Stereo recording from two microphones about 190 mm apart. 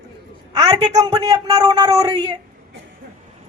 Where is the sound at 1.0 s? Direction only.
20° right (ahead or behind).